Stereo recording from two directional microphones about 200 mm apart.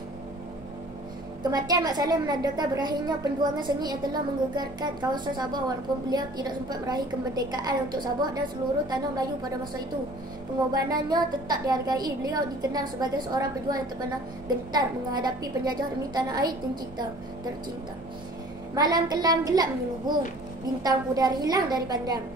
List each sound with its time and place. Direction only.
1.4 s a woman's voice: 20° right (ahead or behind)
10.7 s a woman's voice: 20° right (ahead or behind)
18.8 s a woman's voice: 20° right (ahead or behind)